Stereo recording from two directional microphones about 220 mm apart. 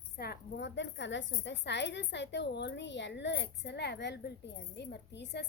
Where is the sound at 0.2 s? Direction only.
45° left (ahead or behind).